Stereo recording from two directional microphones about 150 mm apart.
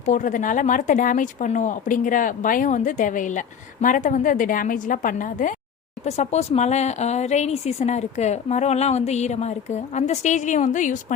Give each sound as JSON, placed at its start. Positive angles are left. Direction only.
{"t": 0.0, "sound": "speech", "side_deg": 55}
{"t": 6.1, "sound": "a woman's voice", "side_deg": 45}